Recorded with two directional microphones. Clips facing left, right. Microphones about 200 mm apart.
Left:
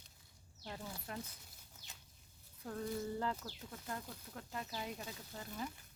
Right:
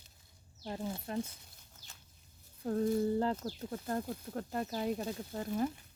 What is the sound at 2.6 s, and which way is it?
Speech, 35° right (ahead or behind).